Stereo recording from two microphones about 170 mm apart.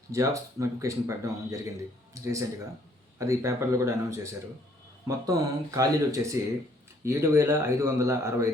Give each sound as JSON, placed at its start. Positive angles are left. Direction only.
{"t": 0.1, "sound": "speech", "side_deg": -20}
{"t": 3.2, "sound": "speech", "side_deg": -20}